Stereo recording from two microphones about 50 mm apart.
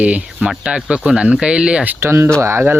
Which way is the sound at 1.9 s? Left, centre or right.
Right.